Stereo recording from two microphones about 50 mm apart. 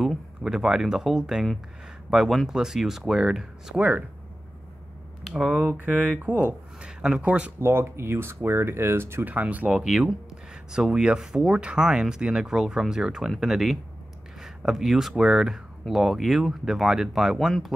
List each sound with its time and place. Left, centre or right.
0.4 s speech: centre
5.8 s speech: right
6.8 s speech: centre
7.6 s speech: right
9.2 s speech: right
9.8 s speech: centre